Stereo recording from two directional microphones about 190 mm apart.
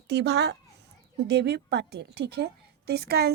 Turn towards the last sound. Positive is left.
turn(degrees=-55)  # may be behind; listen again after turning